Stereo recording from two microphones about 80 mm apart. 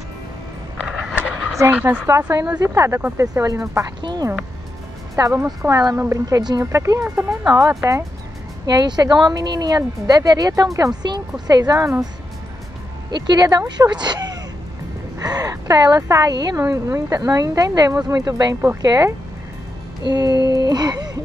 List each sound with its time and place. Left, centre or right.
0.7 s a sound: centre
1.7 s speech: centre
2.6 s speech: right
4.0 s speech: right
5.1 s speech: right
8.6 s speech: right
13.1 s speech: right
15.1 s speech: right
16.5 s speech: right
20.1 s speech: right